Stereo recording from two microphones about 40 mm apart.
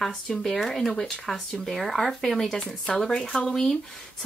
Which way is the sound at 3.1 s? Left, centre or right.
Left.